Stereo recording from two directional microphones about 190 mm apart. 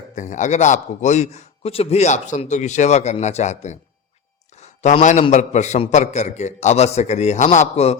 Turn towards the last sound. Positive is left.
turn(degrees=35)  # may be behind; listen again after turning